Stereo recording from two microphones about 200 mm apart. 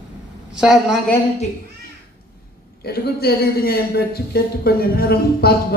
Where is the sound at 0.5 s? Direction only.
5° right (ahead or behind).